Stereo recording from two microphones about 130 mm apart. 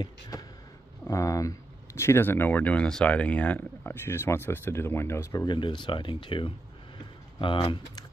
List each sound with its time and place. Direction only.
1.0 s speech: 25° left (ahead or behind)